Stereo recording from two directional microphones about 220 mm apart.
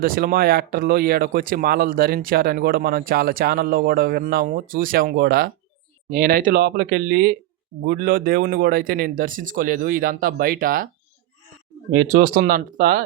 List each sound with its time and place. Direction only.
0.0 s speech: 40° right (ahead or behind)
11.9 s speech: 40° right (ahead or behind)